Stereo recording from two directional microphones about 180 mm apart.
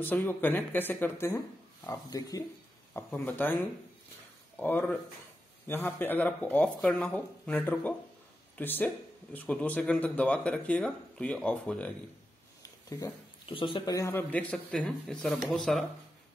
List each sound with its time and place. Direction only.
0.0 s speech: 10° left (ahead or behind)
4.6 s speech: 10° left (ahead or behind)
12.6 s speech: 20° left (ahead or behind); by 15.8 s centre (ahead or behind)